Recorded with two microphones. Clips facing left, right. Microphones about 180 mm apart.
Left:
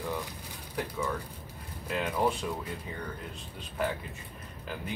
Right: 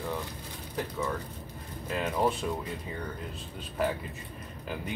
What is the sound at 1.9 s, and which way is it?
Speech, centre (ahead or behind).